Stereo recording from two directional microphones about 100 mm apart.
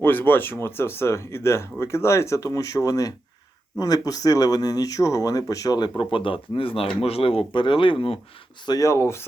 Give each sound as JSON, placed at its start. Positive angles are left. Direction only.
{"t": 0.0, "sound": "speech", "side_deg": 20}
{"t": 6.0, "sound": "speech", "side_deg": 60}
{"t": 8.6, "sound": "speech", "side_deg": 35}